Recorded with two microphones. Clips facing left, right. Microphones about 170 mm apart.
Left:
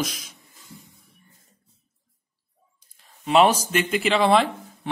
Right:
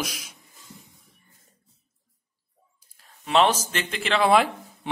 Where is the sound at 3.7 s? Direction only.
5° left (ahead or behind).